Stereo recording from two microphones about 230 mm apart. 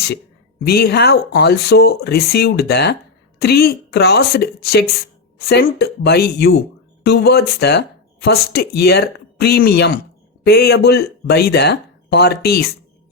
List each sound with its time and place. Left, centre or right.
0.6 s speech: left